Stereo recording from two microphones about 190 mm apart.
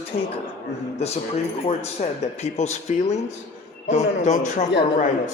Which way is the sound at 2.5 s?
35° left (ahead or behind).